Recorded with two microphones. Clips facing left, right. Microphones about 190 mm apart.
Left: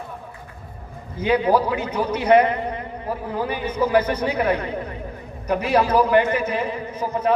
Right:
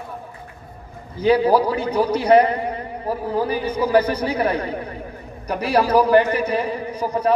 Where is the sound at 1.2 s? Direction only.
35° right (ahead or behind).